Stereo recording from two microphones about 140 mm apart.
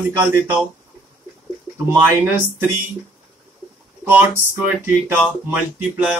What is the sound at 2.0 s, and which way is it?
Speech, 15° right (ahead or behind).